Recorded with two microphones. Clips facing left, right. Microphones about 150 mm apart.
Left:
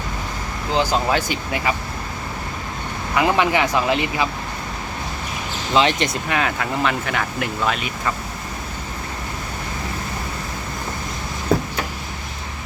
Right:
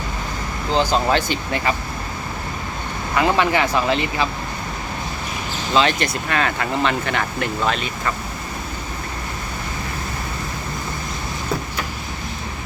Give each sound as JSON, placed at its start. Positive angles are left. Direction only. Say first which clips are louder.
{"t": 0.7, "sound": "speech", "louder": "right 1 dB", "side_deg": 10}
{"t": 3.2, "sound": "speech", "louder": "even", "side_deg": 15}
{"t": 5.7, "sound": "speech", "louder": "left 1 dB", "side_deg": 20}